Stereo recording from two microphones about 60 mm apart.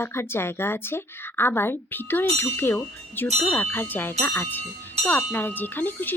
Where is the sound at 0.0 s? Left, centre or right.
Left.